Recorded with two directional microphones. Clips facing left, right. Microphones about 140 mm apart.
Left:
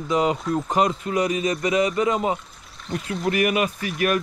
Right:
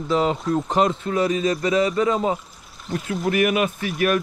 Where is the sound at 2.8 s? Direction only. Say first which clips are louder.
Right 1 dB; centre (ahead or behind).